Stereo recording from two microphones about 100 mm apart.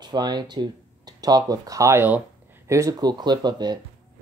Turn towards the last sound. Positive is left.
turn(degrees=-45)  # may be behind; listen again after turning